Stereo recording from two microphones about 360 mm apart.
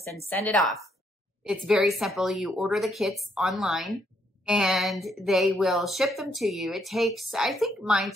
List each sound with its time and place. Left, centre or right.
0.0 s a woman's voice: centre